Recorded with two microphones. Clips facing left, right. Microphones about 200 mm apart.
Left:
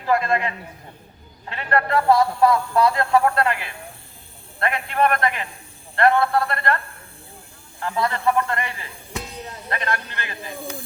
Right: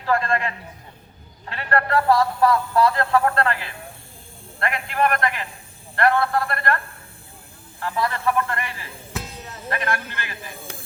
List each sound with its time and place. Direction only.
0.0 s a man's voice: 15° left (ahead or behind)
4.9 s a man's voice: 30° left (ahead or behind)
6.0 s a man's voice: 15° left (ahead or behind)
7.8 s a man's voice: 20° left (ahead or behind)
9.1 s a sound: centre (ahead or behind)
9.7 s a man's voice: 20° left (ahead or behind)